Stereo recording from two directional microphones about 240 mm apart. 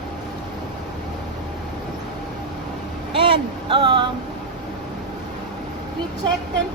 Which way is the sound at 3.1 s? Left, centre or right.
Right.